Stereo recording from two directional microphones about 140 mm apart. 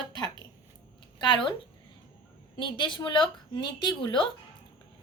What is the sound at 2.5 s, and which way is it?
A woman's voice, 35° left (ahead or behind).